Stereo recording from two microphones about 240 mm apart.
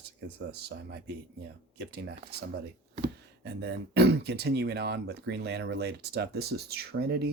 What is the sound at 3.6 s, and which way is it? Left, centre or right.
Speech, right.